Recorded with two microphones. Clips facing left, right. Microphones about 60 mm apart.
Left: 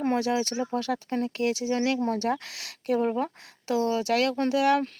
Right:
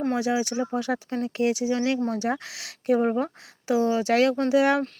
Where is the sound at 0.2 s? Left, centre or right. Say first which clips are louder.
Right 2 dB; centre.